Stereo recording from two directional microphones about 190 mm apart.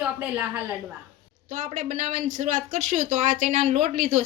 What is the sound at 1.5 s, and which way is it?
Speech, 40° right (ahead or behind).